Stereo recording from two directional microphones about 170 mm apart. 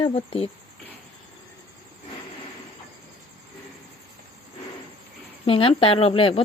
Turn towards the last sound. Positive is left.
turn(degrees=35)  # may be behind; listen again after turning